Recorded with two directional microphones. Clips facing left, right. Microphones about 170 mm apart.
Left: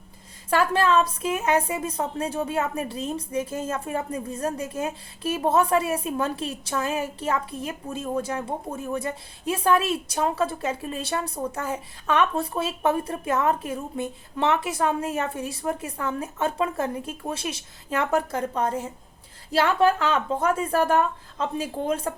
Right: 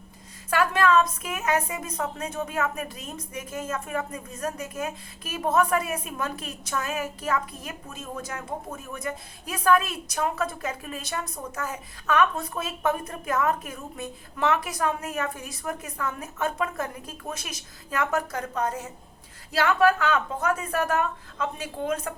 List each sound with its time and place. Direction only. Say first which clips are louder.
0.5 s a woman's voice: left 1 dB; 30° left (ahead or behind)